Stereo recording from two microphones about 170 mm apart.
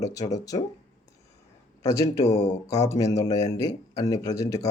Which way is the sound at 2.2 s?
40° left (ahead or behind).